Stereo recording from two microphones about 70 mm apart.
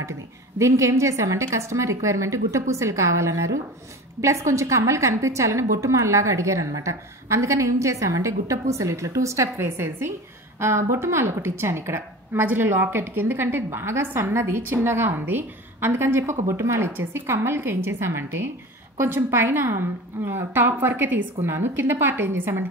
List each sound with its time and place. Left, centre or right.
0.6 s a woman's voice: right